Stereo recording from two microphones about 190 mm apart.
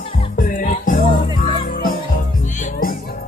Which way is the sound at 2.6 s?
50° left (ahead or behind).